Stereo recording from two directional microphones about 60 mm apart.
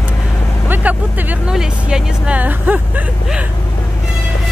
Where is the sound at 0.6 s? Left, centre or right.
Right.